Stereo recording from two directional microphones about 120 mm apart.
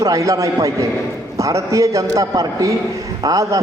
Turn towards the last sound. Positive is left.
turn(degrees=-30)  # may be behind; listen again after turning